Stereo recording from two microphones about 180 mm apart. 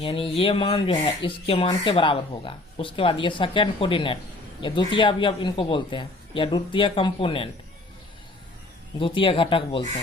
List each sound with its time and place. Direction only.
0.0 s speech: 30° left (ahead or behind)
9.0 s speech: 30° left (ahead or behind)